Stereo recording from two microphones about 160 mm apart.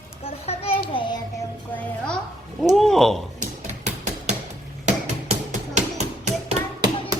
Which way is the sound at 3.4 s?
45° right (ahead or behind).